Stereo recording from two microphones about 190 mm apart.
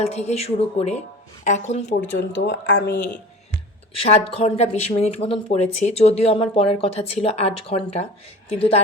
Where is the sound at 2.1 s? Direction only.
70° left (ahead or behind).